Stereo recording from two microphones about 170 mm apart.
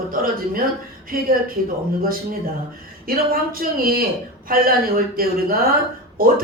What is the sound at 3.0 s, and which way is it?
Speech, 60° right (ahead or behind).